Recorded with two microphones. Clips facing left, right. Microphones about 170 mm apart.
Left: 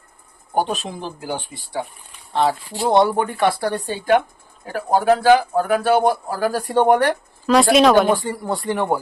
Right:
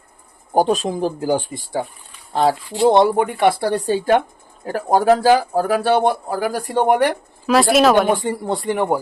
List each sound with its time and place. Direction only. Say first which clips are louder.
0.5 s a man's voice: right 5 dB; 40° right (ahead or behind)
3.2 s speech: right 3 dB; 20° right (ahead or behind)
3.6 s a man's voice: right 5 dB; 35° right (ahead or behind)
6.4 s speech: left 2 dB; 10° right (ahead or behind)
8.2 s speech: right 3 dB; 25° right (ahead or behind)
8.7 s speech: right 2 dB; 15° right (ahead or behind)